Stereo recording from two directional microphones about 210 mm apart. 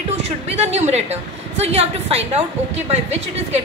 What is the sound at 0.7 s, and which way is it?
A woman's voice, 30° right (ahead or behind).